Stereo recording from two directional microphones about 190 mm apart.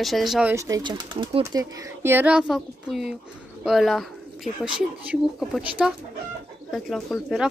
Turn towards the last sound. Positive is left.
turn(degrees=0)  # may be behind; listen again after turning